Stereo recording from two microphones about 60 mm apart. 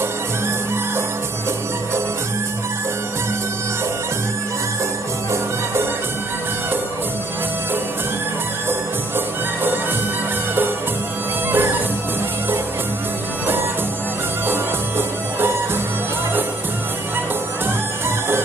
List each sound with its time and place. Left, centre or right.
11.5 s music: right
14.5 s music: right